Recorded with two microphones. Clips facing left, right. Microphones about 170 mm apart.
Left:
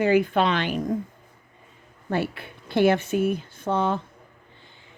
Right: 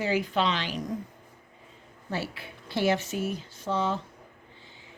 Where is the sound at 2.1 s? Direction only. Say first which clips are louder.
Left 7 dB; 55° left (ahead or behind).